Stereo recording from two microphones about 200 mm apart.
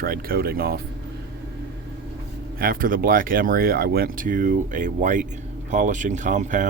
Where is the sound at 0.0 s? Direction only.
50° right (ahead or behind).